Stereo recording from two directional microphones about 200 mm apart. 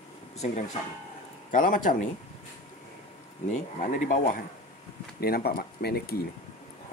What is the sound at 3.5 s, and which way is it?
Speech, 40° left (ahead or behind).